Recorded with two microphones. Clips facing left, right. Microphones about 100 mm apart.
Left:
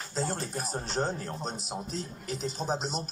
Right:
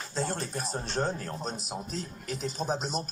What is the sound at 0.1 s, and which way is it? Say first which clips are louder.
A man's voice: even; 15° left (ahead or behind).